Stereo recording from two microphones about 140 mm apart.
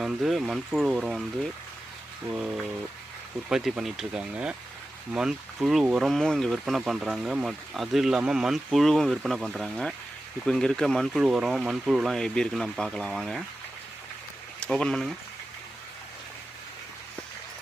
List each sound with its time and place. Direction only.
0.0 s speech: 5° right (ahead or behind)
2.3 s speech: 5° right (ahead or behind)
14.6 s speech: 5° left (ahead or behind)